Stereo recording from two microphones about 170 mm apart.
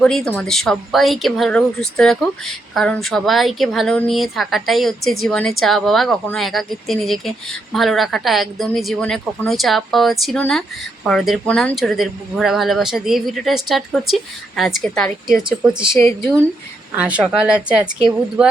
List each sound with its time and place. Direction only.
0.0 s speech: 5° left (ahead or behind)
16.0 s speech: 15° left (ahead or behind)
16.9 s speech: 5° right (ahead or behind)